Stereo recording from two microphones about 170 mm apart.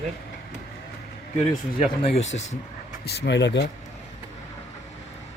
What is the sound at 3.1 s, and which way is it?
Speech, 85° left.